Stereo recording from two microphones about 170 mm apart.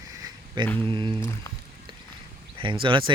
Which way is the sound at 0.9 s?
30° right (ahead or behind).